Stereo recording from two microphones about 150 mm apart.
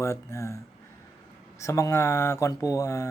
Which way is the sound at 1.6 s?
20° left (ahead or behind).